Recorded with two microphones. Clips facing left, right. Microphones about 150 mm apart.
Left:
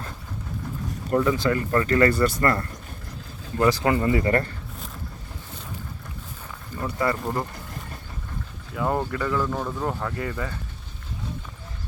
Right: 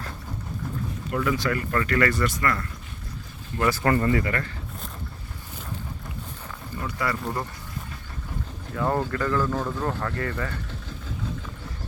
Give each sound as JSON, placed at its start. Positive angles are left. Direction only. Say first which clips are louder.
{"t": 1.1, "sound": "speech", "louder": "left 4 dB", "side_deg": 30}
{"t": 3.8, "sound": "speech", "louder": "even", "side_deg": 15}
{"t": 4.2, "sound": "speech", "louder": "left 6 dB", "side_deg": 35}
{"t": 6.8, "sound": "speech", "louder": "left 4 dB", "side_deg": 25}
{"t": 8.8, "sound": "speech", "louder": "even", "side_deg": 10}